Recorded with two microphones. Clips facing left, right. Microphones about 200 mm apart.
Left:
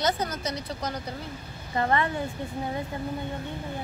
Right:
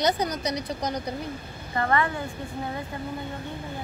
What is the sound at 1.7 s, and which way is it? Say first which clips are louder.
Speech: right 1 dB; 20° left (ahead or behind).